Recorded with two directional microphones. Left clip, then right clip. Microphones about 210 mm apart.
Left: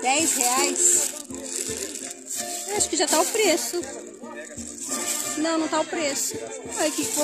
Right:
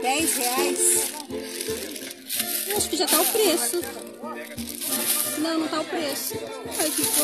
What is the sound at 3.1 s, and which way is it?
Speech, centre (ahead or behind).